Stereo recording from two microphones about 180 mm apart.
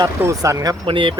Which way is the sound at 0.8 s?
30° right (ahead or behind).